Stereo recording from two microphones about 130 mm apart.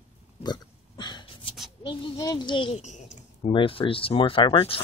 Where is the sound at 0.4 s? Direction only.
35° left (ahead or behind).